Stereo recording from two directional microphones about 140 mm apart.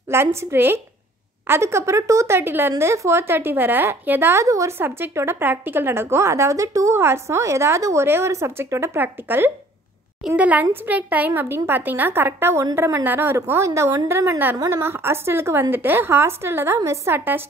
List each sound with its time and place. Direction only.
0.1 s speech: 20° right (ahead or behind)